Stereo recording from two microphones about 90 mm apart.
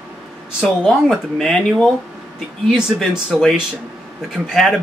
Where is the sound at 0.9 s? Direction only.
5° left (ahead or behind).